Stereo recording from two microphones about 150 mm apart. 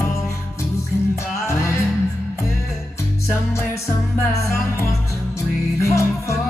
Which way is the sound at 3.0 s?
20° left (ahead or behind).